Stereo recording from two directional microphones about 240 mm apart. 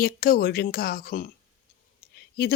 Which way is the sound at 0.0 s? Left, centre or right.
Left.